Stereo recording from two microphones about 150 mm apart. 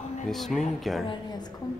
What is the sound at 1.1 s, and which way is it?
Speech, 30° left (ahead or behind).